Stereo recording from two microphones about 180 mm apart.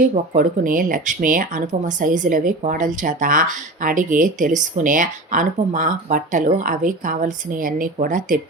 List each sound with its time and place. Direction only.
0.1 s speech: 50° right (ahead or behind)